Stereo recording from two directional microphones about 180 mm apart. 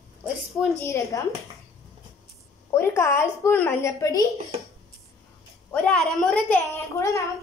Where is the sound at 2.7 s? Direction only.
15° left (ahead or behind).